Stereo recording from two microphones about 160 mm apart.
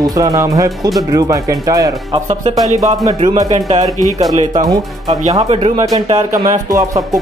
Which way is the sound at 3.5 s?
50° right (ahead or behind).